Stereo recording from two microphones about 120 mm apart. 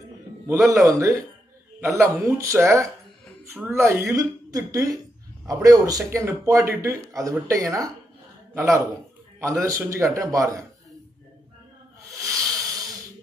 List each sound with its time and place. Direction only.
0.5 s a man's voice: 25° right (ahead or behind)
12.2 s snake: 25° right (ahead or behind)